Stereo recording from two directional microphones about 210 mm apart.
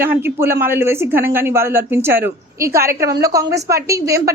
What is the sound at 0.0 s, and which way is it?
A woman's voice, 10° right (ahead or behind).